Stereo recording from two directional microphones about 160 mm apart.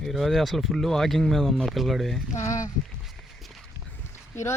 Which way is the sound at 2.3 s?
20° left (ahead or behind).